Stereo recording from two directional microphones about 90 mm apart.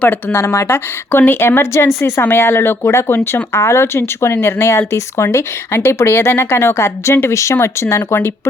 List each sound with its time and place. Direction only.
0.0 s speech: 20° left (ahead or behind)
0.3 s speech: 30° left (ahead or behind)